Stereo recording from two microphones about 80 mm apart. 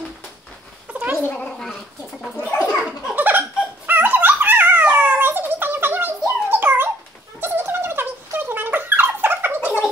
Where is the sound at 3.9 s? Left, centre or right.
Right.